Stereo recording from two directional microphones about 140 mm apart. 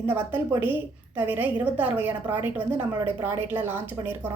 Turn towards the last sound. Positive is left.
turn(degrees=-15)  # may be behind; listen again after turning